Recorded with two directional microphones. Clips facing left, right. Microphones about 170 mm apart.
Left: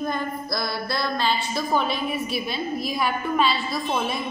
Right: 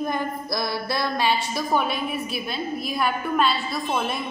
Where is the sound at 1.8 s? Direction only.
5° right (ahead or behind).